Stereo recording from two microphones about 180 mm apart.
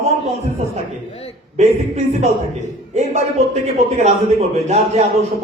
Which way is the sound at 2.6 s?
40° right (ahead or behind).